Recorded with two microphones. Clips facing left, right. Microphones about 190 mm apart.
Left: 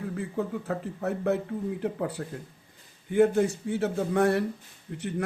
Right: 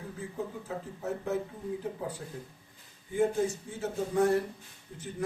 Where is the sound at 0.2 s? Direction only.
70° left (ahead or behind).